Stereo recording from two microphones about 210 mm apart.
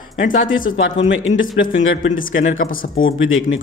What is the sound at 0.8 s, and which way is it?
A man's voice, 60° left (ahead or behind).